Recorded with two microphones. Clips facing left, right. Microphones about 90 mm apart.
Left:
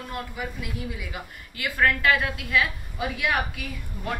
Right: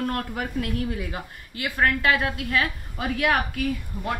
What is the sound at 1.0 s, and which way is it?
A woman's voice, 35° right (ahead or behind).